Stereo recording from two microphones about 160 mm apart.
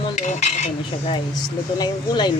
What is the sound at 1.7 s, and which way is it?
Speech, 25° left (ahead or behind).